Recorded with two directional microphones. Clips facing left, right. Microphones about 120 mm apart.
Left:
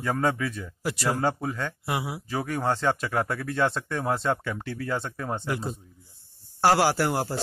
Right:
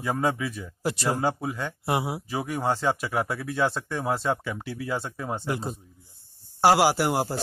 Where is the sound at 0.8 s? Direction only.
25° right (ahead or behind).